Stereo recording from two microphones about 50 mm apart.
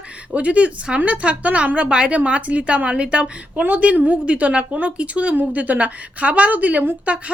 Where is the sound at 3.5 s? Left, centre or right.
Right.